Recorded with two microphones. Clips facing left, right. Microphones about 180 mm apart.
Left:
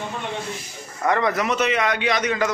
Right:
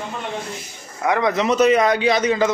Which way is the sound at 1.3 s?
30° right (ahead or behind).